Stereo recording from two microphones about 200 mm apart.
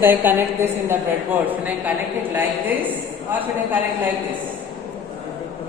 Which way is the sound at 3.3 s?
10° right (ahead or behind).